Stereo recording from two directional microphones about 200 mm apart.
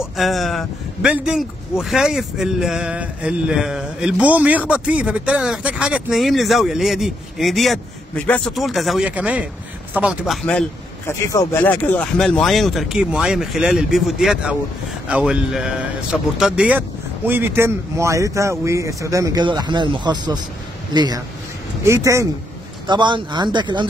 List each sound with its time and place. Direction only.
0.0 s speech: centre (ahead or behind)
11.1 s speech: 15° left (ahead or behind); by 23.9 s 20° right (ahead or behind)